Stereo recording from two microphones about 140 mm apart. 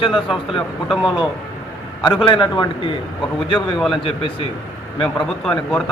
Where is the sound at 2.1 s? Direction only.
35° left (ahead or behind).